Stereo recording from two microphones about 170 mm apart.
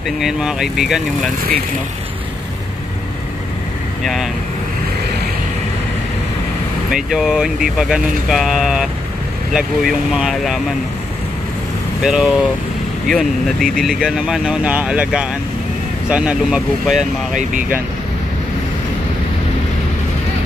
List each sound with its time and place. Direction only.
0.2 s speech: 5° right (ahead or behind)
4.0 s speech: centre (ahead or behind)
6.9 s speech: 5° right (ahead or behind)
12.0 s speech: 5° right (ahead or behind)
17.3 s speech: 50° right (ahead or behind)